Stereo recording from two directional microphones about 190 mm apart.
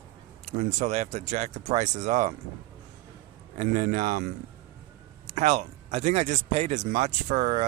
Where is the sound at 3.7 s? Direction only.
40° right (ahead or behind).